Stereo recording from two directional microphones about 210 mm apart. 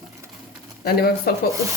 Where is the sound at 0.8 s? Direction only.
50° left (ahead or behind).